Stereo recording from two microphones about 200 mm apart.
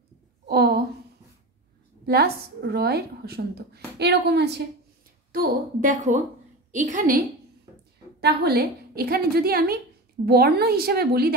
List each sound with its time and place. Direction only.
0.5 s a sound: 50° right (ahead or behind)
2.0 s a woman's voice: 50° right (ahead or behind)
5.3 s a woman's voice: 40° right (ahead or behind)
8.2 s a woman's voice: 55° right (ahead or behind)